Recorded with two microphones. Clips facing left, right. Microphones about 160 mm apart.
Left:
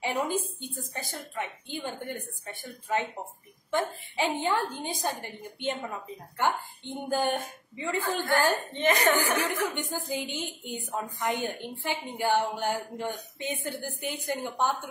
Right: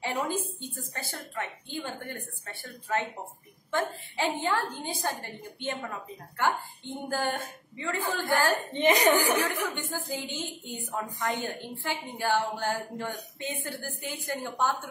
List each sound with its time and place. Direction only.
0.0 s a woman's voice: 15° left (ahead or behind)
8.7 s speech: 15° right (ahead or behind)
9.7 s a woman's voice: 15° left (ahead or behind)